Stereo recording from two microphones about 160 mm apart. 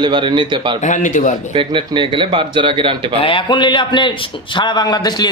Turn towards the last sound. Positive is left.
turn(degrees=25)  # may be behind; listen again after turning